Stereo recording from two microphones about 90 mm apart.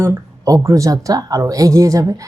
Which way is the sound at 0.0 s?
30° right (ahead or behind).